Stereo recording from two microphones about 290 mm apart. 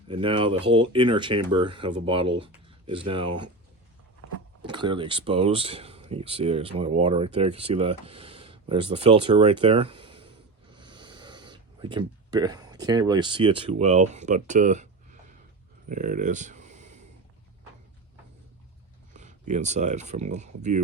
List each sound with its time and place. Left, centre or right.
0.1 s speech: centre
4.6 s speech: centre
15.9 s a sound: right
19.1 s speech: right